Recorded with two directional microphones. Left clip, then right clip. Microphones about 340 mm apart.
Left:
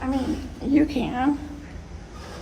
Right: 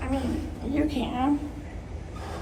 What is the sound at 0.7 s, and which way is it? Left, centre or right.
Speech, left.